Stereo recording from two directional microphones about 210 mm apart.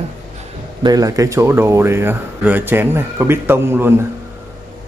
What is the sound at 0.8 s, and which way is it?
Speech, 15° right (ahead or behind).